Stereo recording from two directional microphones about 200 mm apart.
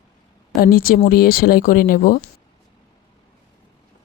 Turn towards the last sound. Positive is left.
turn(degrees=45)  # may be behind; listen again after turning